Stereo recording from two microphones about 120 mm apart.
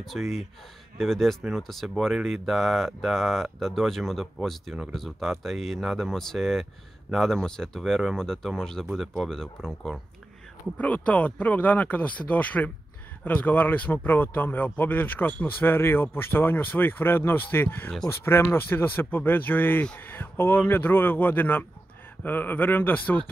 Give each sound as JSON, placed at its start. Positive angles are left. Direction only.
{"t": 0.0, "sound": "speech", "side_deg": 0}